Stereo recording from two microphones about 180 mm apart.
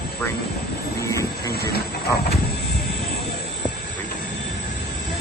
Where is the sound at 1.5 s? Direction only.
60° left (ahead or behind).